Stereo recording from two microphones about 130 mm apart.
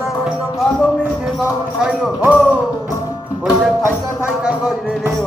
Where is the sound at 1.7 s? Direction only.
10° right (ahead or behind).